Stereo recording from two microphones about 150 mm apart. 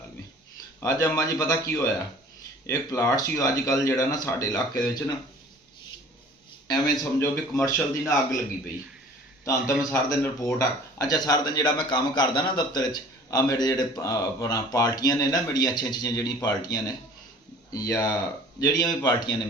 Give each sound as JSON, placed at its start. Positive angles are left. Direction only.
{"t": 0.8, "sound": "speech", "side_deg": 20}
{"t": 6.7, "sound": "speech", "side_deg": 25}
{"t": 9.4, "sound": "a man's voice", "side_deg": 20}